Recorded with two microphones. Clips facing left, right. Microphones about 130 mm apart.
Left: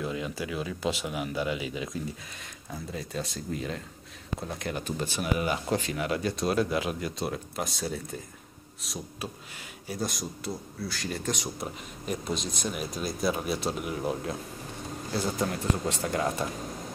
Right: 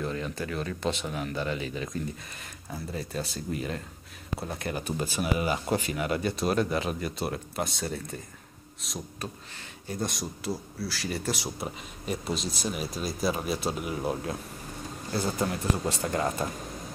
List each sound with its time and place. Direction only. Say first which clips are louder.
0.0 s speech: even; 5° left (ahead or behind)
2.7 s a man's voice: right 1 dB; 5° right (ahead or behind)